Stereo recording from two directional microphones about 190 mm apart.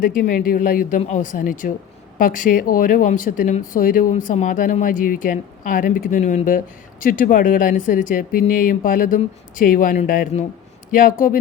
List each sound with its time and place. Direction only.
0.0 s speech: 50° left (ahead or behind)